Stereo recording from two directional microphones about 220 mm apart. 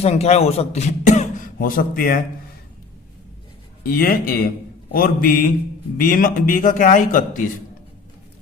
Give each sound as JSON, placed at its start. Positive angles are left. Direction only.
{"t": 0.0, "sound": "speech", "side_deg": 30}
{"t": 3.8, "sound": "a man's voice", "side_deg": 40}